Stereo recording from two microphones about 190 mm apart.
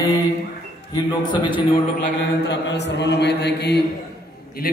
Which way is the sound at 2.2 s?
70° left (ahead or behind).